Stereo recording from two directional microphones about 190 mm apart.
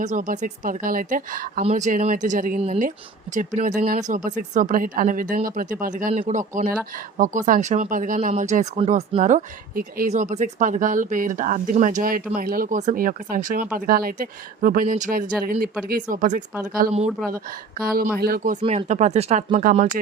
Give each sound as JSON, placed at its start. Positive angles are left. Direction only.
{"t": 0.0, "sound": "speech", "side_deg": -40}
{"t": 18.6, "sound": "speech", "side_deg": -35}